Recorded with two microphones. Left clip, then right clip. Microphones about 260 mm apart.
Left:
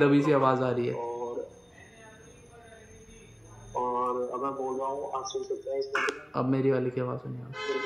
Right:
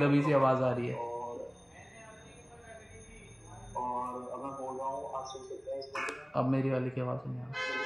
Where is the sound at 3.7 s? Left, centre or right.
Centre.